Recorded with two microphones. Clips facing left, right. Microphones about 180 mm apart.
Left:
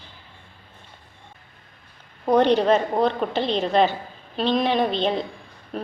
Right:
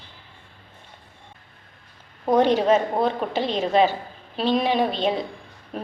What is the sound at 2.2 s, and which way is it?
A woman's voice, 10° right (ahead or behind).